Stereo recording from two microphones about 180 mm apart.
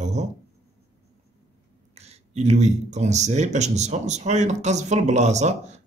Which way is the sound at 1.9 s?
35° right (ahead or behind).